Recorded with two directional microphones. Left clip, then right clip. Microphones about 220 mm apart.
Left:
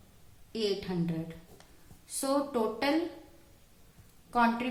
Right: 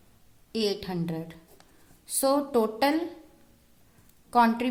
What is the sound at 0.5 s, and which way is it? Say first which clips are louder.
A woman's voice: right 3 dB; 45° right (ahead or behind).